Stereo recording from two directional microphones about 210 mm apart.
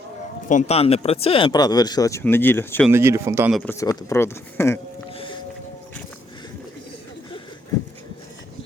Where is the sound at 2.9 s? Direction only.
10° right (ahead or behind).